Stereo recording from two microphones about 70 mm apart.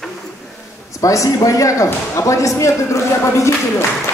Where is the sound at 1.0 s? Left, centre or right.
Left.